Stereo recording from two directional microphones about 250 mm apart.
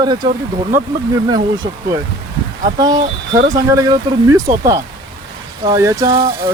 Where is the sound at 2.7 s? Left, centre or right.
Centre.